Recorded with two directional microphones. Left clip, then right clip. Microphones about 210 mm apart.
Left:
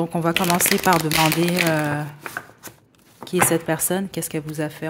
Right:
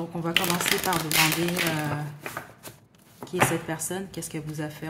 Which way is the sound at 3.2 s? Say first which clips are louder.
Left 7 dB; 15° left (ahead or behind).